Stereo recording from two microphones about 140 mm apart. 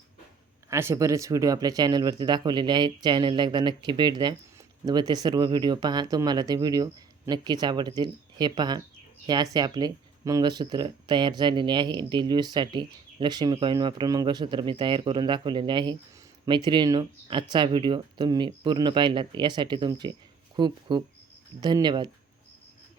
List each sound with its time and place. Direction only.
0.7 s speech: 20° right (ahead or behind)